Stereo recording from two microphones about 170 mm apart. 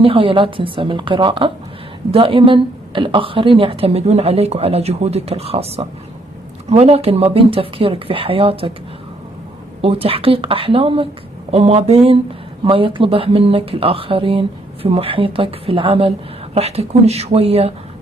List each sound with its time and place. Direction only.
0.0 s a woman's voice: 30° right (ahead or behind)
9.8 s a woman's voice: 35° right (ahead or behind)